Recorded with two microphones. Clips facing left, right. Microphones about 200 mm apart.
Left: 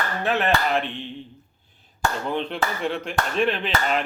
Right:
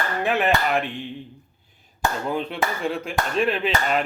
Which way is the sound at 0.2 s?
10° right (ahead or behind).